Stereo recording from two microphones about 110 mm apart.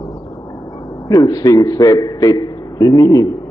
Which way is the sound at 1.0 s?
35° left (ahead or behind).